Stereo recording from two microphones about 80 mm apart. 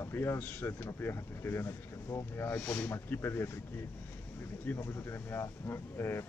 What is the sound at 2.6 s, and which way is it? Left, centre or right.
Speech, centre.